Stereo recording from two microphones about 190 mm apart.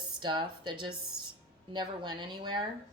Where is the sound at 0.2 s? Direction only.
25° right (ahead or behind).